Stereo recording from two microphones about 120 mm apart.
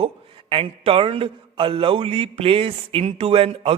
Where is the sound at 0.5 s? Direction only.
50° right (ahead or behind).